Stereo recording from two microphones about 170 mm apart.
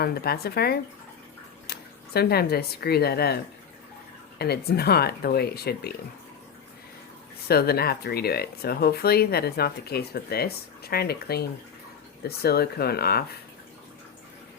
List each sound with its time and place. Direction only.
0.0 s speech: 65° left (ahead or behind)
2.1 s speech: 65° left (ahead or behind)
7.4 s speech: 65° left (ahead or behind)